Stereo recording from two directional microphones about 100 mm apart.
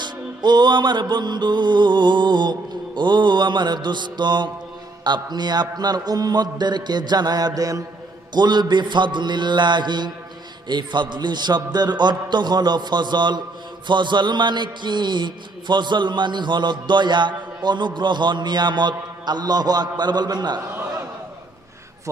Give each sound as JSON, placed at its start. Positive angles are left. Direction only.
{"t": 0.0, "sound": "a man's voice", "side_deg": -50}
{"t": 8.3, "sound": "a man's voice", "side_deg": -45}